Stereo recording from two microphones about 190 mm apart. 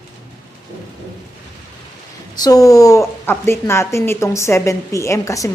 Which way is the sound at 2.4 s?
20° left (ahead or behind).